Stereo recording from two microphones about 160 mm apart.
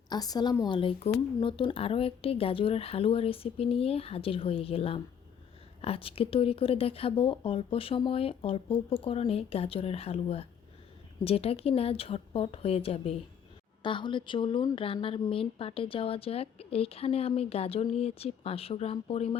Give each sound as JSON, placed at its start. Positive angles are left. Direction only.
{"t": 0.1, "sound": "a woman's voice", "side_deg": 25}